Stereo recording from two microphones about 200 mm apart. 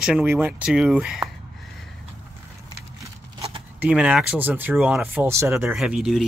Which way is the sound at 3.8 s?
5° right (ahead or behind).